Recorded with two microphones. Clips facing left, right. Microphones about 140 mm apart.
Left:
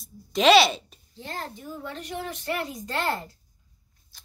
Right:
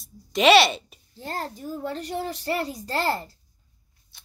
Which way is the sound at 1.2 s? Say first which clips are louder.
Right 4 dB; 40° right (ahead or behind).